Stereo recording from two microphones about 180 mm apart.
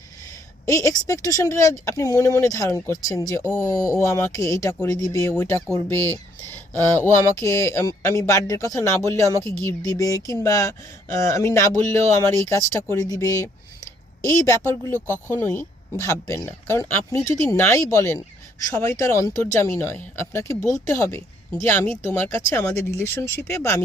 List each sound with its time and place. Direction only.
0.6 s speech: 15° left (ahead or behind)
14.9 s speech: 15° right (ahead or behind)
15.3 s speech: 15° left (ahead or behind)